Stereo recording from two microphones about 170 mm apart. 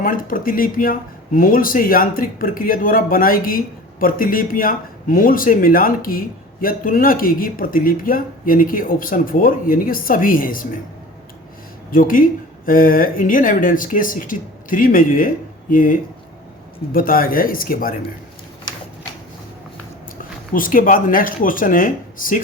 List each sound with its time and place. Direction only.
0.0 s speech: 55° left (ahead or behind)
11.9 s speech: 55° left (ahead or behind)
20.5 s speech: 55° left (ahead or behind)